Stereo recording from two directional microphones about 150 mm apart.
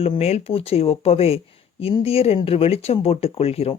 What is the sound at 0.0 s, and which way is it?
Speech, 40° left (ahead or behind).